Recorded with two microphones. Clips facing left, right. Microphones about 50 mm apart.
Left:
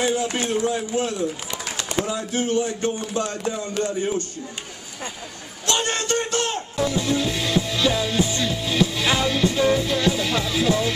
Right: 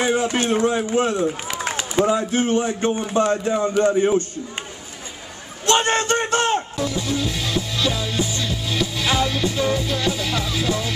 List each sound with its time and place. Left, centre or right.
0.0 s speech: right
5.7 s a sound: right
6.8 s music: centre